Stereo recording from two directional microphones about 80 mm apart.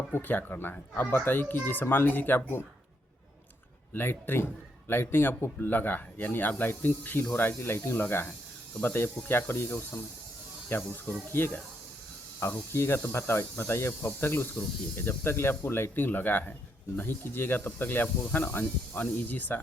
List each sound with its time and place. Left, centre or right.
0.1 s speech: left
3.9 s speech: left